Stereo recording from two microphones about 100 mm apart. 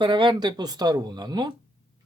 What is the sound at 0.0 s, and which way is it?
A man's voice, 50° right (ahead or behind).